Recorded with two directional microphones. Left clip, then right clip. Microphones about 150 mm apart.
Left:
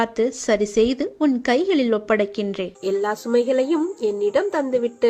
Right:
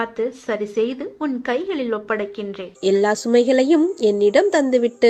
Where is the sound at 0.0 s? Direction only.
60° left (ahead or behind).